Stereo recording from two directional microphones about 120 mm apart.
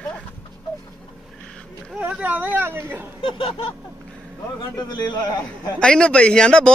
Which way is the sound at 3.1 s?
50° left (ahead or behind).